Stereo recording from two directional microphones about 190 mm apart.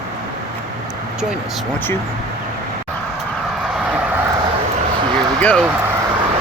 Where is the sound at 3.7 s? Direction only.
5° right (ahead or behind).